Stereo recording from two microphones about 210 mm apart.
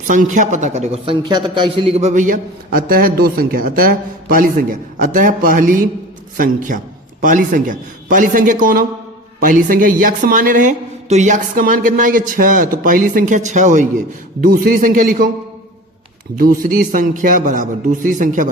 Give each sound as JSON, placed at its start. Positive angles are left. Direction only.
{"t": 0.1, "sound": "a man's voice", "side_deg": -35}
{"t": 16.4, "sound": "a man's voice", "side_deg": -40}